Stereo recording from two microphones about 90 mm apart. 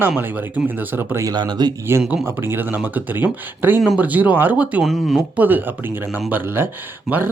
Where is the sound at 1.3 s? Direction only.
50° right (ahead or behind).